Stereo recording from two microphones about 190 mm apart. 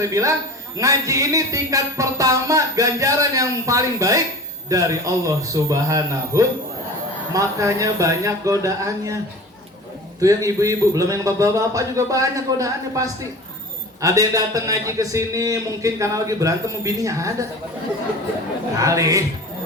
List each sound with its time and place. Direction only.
0.0 s speech: 15° right (ahead or behind)
10.2 s speech: 15° right (ahead or behind)
18.8 s speech: 15° right (ahead or behind)